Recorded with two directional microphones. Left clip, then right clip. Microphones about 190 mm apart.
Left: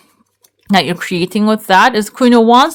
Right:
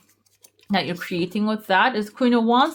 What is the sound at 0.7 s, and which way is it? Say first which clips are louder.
Speech: left 11 dB; 40° left (ahead or behind).